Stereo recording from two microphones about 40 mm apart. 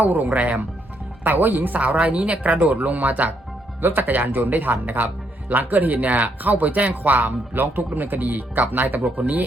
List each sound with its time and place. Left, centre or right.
0.0 s speech: right
1.2 s speech: right
2.0 s speech: right
3.8 s speech: right